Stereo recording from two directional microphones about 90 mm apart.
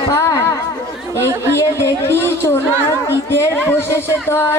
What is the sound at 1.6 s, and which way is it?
A woman's voice, 30° left (ahead or behind).